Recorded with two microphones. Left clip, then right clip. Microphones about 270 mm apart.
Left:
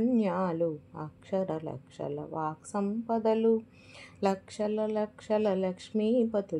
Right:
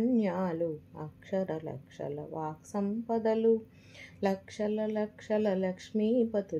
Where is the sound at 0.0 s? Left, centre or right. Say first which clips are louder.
Left 2 dB; left.